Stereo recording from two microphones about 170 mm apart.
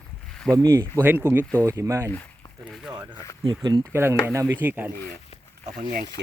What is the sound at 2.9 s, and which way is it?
Speech, 25° right (ahead or behind).